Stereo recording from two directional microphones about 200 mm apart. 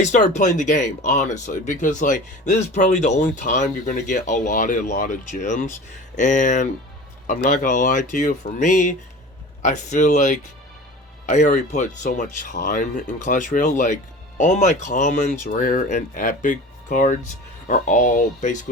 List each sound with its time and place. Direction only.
0.0 s speech: 40° left (ahead or behind)